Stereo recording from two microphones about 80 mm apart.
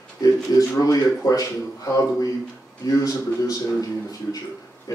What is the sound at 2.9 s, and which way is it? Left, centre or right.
Speech, left.